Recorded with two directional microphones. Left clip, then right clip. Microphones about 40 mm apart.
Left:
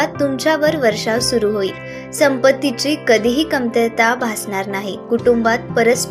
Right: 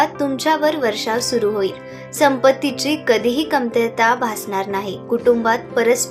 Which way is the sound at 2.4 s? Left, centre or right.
Left.